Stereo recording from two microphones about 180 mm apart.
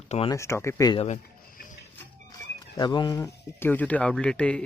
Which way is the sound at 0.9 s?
40° left (ahead or behind).